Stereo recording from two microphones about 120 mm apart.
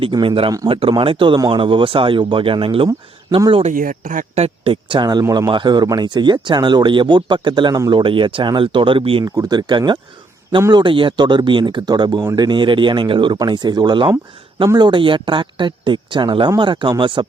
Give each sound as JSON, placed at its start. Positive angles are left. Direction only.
{"t": 0.0, "sound": "speech", "side_deg": -45}
{"t": 3.5, "sound": "speech", "side_deg": -80}
{"t": 9.2, "sound": "speech", "side_deg": -30}